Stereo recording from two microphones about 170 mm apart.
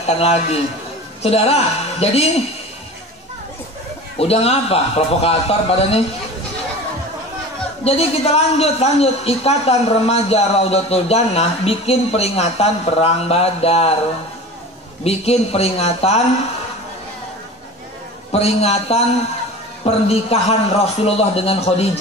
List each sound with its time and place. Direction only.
0.0 s a woman's voice: 40° left (ahead or behind)
4.2 s a woman's voice: 35° left (ahead or behind)
7.8 s a woman's voice: 35° left (ahead or behind)
15.0 s a woman's voice: 35° left (ahead or behind)
18.3 s a woman's voice: 35° left (ahead or behind)